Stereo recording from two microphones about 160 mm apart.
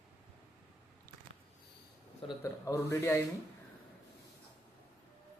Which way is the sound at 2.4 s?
20° left (ahead or behind).